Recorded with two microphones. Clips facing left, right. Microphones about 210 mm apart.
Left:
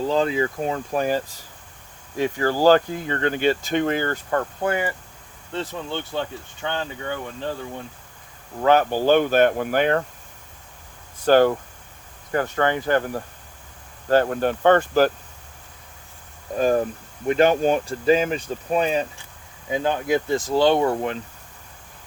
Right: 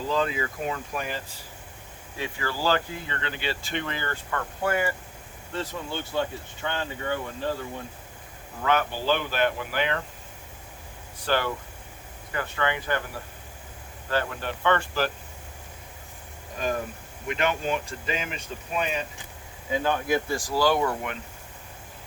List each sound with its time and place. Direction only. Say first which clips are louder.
0.1 s speech: left 3 dB; 30° left (ahead or behind)
4.6 s speech: right 1 dB; 20° left (ahead or behind)
6.6 s speech: left 3 dB; 25° left (ahead or behind)
8.6 s speech: left 8 dB; 40° left (ahead or behind)
11.3 s speech: left 11 dB; 45° left (ahead or behind)
16.6 s speech: left 9 dB; 35° left (ahead or behind)
19.7 s speech: left 3 dB; 20° left (ahead or behind)